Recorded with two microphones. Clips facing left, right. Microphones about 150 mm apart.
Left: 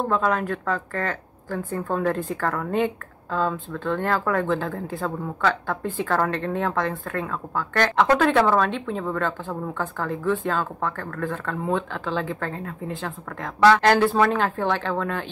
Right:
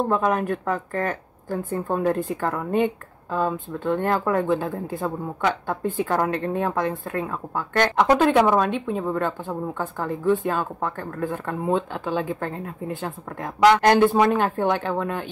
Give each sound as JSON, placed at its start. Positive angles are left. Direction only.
{"t": 0.1, "sound": "speech", "side_deg": -20}
{"t": 2.7, "sound": "speech", "side_deg": 0}
{"t": 3.3, "sound": "speech", "side_deg": -15}